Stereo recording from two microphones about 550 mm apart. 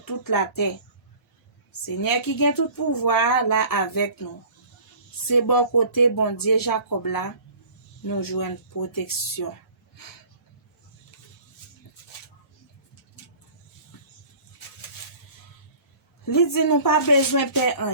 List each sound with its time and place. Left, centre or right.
0.0 s speech: left
1.8 s speech: left
5.3 s speech: left
16.2 s speech: left